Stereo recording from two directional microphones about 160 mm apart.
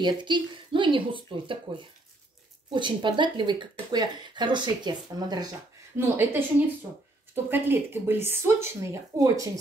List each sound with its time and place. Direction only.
0.0 s speech: 30° right (ahead or behind)
2.7 s speech: 30° right (ahead or behind)
5.9 s speech: 15° right (ahead or behind)
7.4 s speech: 15° right (ahead or behind)